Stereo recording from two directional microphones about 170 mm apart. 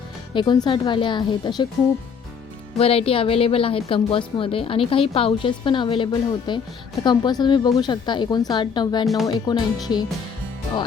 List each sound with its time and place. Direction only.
0.3 s a woman's voice: 30° left (ahead or behind)
2.7 s a woman's voice: 35° left (ahead or behind)